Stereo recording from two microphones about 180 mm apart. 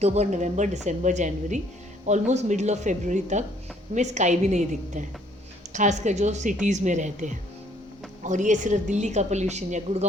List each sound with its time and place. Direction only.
0.0 s a woman's voice: 35° right (ahead or behind)